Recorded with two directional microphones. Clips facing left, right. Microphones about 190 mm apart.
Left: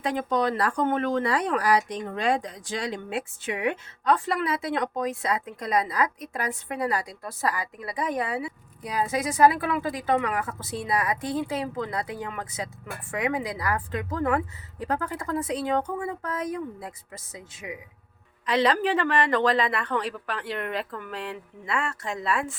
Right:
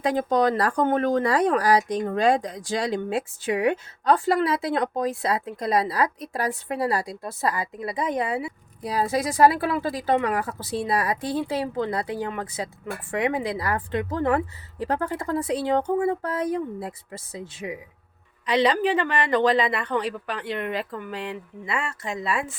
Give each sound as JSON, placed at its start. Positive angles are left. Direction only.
{"t": 0.0, "sound": "speech", "side_deg": -40}
{"t": 8.8, "sound": "speech", "side_deg": -35}
{"t": 18.4, "sound": "a woman's voice", "side_deg": 0}